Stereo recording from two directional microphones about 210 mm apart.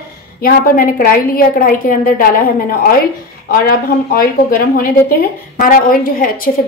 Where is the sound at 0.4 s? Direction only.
45° left (ahead or behind).